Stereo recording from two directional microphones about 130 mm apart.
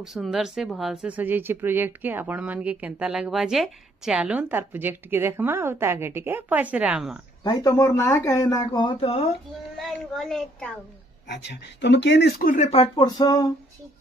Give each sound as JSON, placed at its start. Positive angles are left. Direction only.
{"t": 0.0, "sound": "speech", "side_deg": 0}
{"t": 1.1, "sound": "speech", "side_deg": -15}
{"t": 7.4, "sound": "speech", "side_deg": 25}
{"t": 8.8, "sound": "speech", "side_deg": 45}
{"t": 9.8, "sound": "speech", "side_deg": 0}
{"t": 12.4, "sound": "speech", "side_deg": 65}
{"t": 12.8, "sound": "a sound", "side_deg": 35}